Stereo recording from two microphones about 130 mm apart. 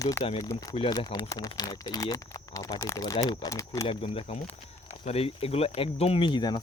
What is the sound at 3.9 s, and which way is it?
Speech, 45° left (ahead or behind).